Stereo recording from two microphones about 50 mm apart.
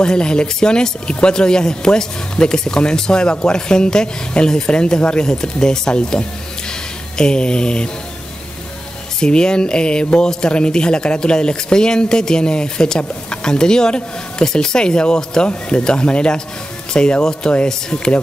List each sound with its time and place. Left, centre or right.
0.0 s speech: centre
9.2 s speech: centre